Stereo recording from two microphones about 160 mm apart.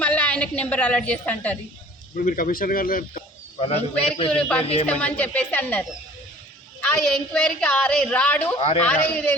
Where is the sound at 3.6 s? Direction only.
40° left (ahead or behind).